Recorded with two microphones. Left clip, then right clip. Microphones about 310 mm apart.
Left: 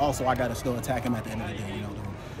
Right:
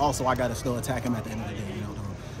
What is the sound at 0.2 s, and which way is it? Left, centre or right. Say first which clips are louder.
Speech: even; centre.